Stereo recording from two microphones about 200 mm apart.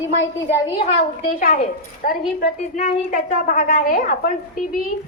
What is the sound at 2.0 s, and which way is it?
A woman's voice, 40° left (ahead or behind).